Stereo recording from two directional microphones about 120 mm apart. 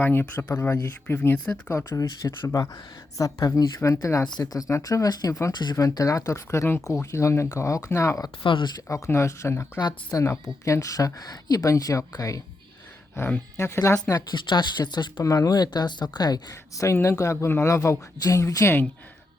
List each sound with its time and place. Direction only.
0.0 s speech: 15° left (ahead or behind)
1.9 s speech: 30° left (ahead or behind)
8.4 s speech: 45° left (ahead or behind)
8.9 s speech: 25° left (ahead or behind)
13.1 s speech: 20° left (ahead or behind)